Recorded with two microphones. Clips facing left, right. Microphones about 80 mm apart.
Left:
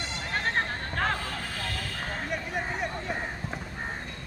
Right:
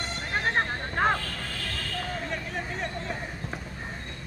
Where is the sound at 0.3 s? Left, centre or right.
Centre.